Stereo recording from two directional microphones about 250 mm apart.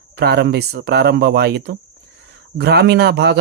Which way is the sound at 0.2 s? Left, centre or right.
Right.